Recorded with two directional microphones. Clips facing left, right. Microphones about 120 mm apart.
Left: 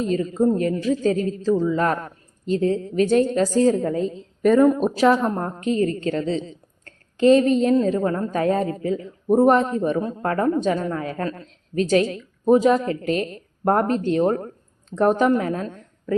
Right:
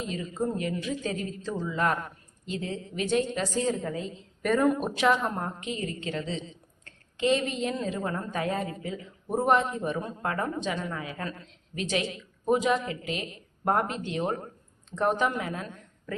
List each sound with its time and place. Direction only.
0.0 s a woman's voice: 40° left (ahead or behind)
4.4 s speech: centre (ahead or behind)
4.8 s a woman's voice: 35° left (ahead or behind)